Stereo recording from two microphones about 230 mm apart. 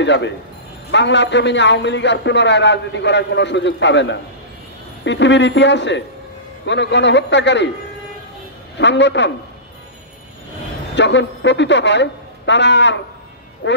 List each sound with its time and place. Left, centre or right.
0.0 s a man's voice: left
8.7 s a man's voice: left
11.0 s a man's voice: left